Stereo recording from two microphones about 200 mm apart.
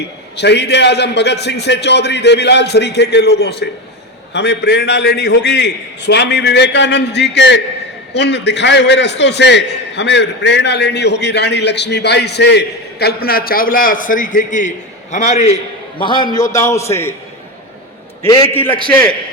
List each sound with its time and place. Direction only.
0.0 s a man's voice: 60° left (ahead or behind); by 17.2 s 15° left (ahead or behind)
18.2 s a man's voice: 15° left (ahead or behind)